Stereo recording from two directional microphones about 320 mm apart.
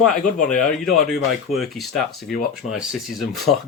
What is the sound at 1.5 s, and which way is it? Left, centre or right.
Speech, centre.